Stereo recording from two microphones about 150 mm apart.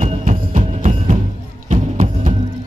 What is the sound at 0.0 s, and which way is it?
Music, 55° right (ahead or behind).